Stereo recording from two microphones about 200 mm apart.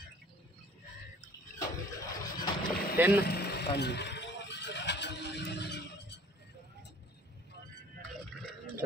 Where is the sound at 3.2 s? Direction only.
50° left (ahead or behind).